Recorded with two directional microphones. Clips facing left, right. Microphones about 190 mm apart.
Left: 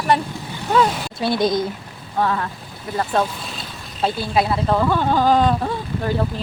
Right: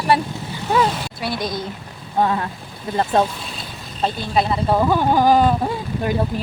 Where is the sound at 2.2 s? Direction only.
25° right (ahead or behind).